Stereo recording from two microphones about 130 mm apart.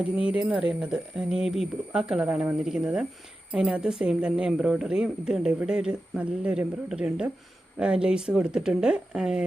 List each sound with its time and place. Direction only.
0.3 s speech: 5° right (ahead or behind)